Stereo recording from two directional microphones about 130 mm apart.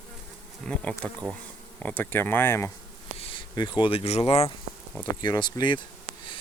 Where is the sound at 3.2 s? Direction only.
45° left (ahead or behind).